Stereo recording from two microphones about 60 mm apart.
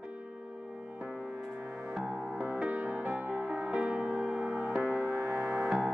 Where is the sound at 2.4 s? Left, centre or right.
Right.